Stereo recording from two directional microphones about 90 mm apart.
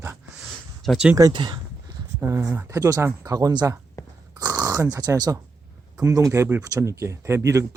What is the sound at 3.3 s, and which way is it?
Speech, 45° right (ahead or behind).